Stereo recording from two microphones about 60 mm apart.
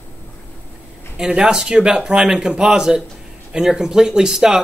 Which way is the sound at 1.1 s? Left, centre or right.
Centre.